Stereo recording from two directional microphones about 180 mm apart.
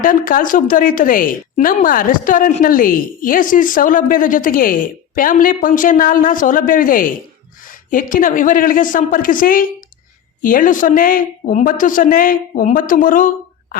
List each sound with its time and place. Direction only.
0.0 s a woman's voice: 50° left (ahead or behind)